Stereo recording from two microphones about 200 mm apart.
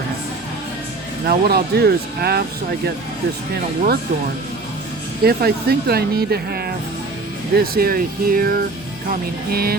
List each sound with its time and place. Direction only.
1.3 s speech: 50° right (ahead or behind)
5.2 s speech: 50° right (ahead or behind)